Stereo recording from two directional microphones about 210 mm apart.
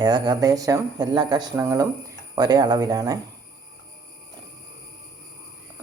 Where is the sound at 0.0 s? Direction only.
20° right (ahead or behind).